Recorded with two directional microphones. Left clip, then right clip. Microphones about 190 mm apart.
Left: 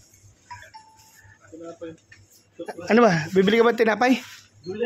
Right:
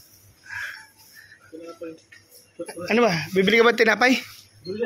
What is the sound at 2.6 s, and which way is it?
Speech, 25° left (ahead or behind).